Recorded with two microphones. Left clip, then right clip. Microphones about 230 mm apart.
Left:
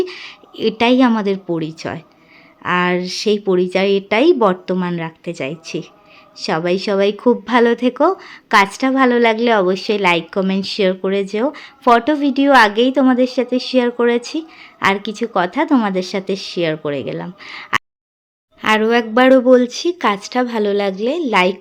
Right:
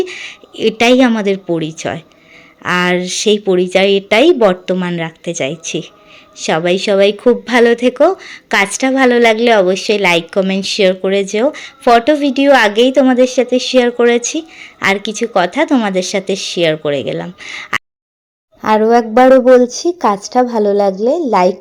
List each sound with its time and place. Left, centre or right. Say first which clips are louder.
0.1 s a sound: right 5 dB; centre
0.8 s a woman's voice: right 4 dB; centre
13.5 s speech: right 6 dB; left
13.7 s speech: right 4 dB; centre
14.2 s speech: right 5 dB; left
14.6 s a woman's voice: right 2 dB; centre
18.9 s a woman's voice: right 5 dB; centre
19.7 s speech: right 3 dB; centre